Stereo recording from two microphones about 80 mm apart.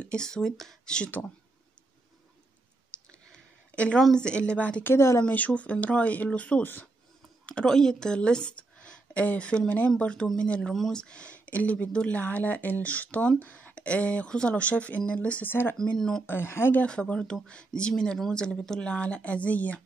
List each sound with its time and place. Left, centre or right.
0.0 s speech: centre
2.9 s clicking: centre
3.3 s a sound: centre
4.0 s a woman's voice: centre
4.9 s speech: left
5.2 s a woman's voice: centre
7.4 s a woman's voice: centre; by 15.7 s left
15.8 s a woman's voice: centre
16.3 s speech: left
16.8 s a woman's voice: centre